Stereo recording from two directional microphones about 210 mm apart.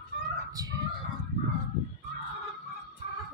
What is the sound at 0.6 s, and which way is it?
Chicken, 15° right (ahead or behind).